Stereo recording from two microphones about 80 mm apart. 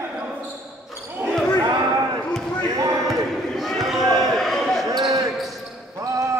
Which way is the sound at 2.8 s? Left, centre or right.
Right.